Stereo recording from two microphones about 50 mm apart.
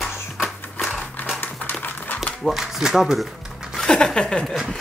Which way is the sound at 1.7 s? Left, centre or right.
Left.